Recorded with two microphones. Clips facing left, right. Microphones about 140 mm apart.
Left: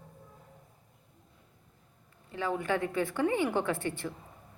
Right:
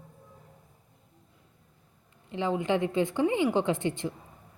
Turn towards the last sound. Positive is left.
turn(degrees=-20)  # may be behind; listen again after turning